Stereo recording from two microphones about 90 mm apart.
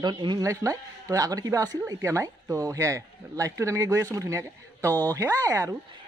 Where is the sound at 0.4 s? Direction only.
35° right (ahead or behind).